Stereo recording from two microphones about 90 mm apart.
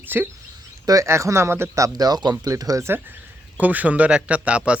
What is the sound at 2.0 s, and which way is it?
Speech, 50° right (ahead or behind).